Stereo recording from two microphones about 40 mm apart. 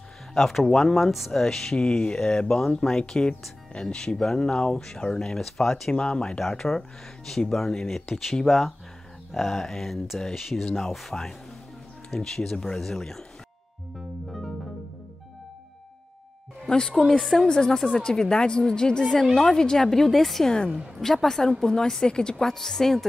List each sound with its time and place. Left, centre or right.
0.3 s speech: centre
0.9 s speech: centre
17.0 s speech: centre
17.4 s speech: centre
20.4 s speech: left
21.0 s speech: centre
22.5 s speech: centre